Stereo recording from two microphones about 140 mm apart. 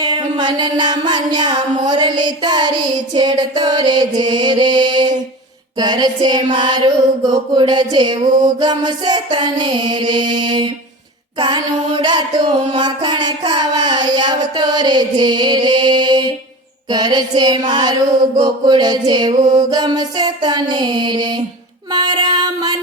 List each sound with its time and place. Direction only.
0.0 s music: 30° right (ahead or behind)